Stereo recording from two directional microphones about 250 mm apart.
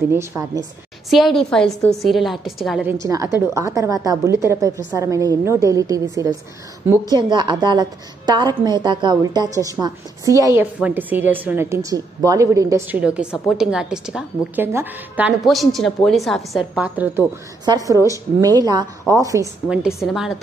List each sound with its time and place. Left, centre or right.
0.1 s a woman's voice: centre
1.1 s a woman's voice: centre